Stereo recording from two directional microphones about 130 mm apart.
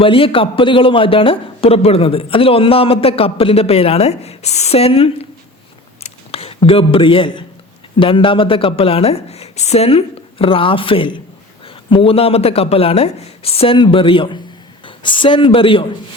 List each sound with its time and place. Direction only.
0.0 s a man's voice: 45° left (ahead or behind)
6.0 s a sound: 50° left (ahead or behind)
7.9 s a man's voice: 40° left (ahead or behind)